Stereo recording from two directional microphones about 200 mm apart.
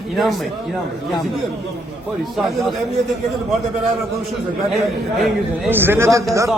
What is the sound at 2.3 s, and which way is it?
Speech, centre (ahead or behind).